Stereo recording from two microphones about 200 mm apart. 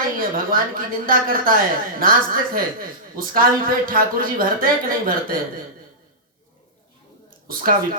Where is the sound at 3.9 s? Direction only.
45° right (ahead or behind).